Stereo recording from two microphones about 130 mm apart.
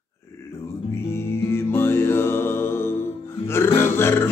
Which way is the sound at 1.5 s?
20° left (ahead or behind).